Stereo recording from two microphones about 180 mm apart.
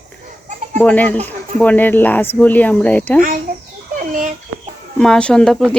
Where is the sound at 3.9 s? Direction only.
45° right (ahead or behind).